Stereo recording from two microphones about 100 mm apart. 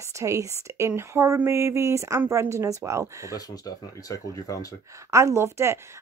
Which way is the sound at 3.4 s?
40° left (ahead or behind).